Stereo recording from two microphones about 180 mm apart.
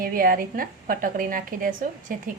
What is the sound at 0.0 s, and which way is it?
A woman's voice, 50° right (ahead or behind).